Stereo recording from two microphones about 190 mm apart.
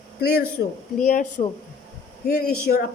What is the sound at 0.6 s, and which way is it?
Speech, 70° left (ahead or behind).